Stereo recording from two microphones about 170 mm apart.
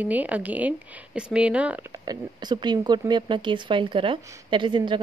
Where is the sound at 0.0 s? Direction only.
10° right (ahead or behind).